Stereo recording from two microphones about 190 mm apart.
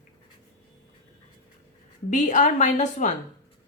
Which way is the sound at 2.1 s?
40° left (ahead or behind).